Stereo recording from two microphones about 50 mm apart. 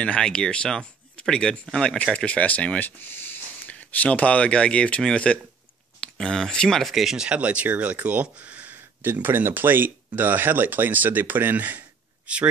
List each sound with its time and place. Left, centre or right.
0.0 s speech: centre
2.1 s speech: left
3.0 s speech: left
3.6 s speech: left; by 6.8 s centre
6.8 s speech: centre
7.3 s speech: right